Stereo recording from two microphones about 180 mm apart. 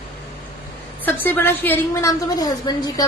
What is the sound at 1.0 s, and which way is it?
A woman's voice, 10° left (ahead or behind).